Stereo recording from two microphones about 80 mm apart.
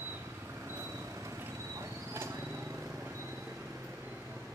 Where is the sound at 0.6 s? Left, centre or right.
Right.